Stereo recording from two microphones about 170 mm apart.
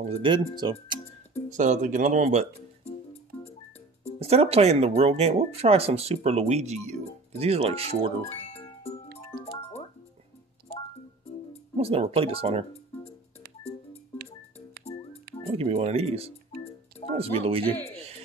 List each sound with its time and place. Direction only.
0.0 s speech: 30° right (ahead or behind)
1.6 s speech: 45° right (ahead or behind)
4.2 s speech: 35° right (ahead or behind)
8.4 s music: 40° left (ahead or behind)
11.7 s speech: 35° right (ahead or behind)
15.5 s speech: 40° right (ahead or behind)